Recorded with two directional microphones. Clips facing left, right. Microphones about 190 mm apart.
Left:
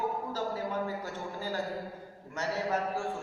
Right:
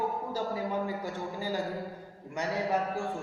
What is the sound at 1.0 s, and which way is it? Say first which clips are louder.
A man's voice: right 3 dB; 10° right (ahead or behind).